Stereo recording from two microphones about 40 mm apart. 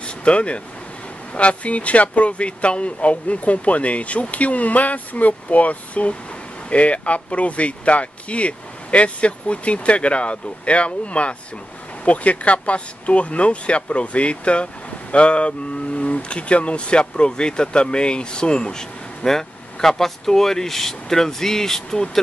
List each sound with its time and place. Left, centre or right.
0.0 s vehicle: left
1.3 s speech: left; by 22.2 s centre